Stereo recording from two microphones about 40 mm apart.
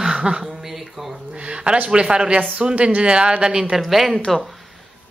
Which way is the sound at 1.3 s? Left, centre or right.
Right.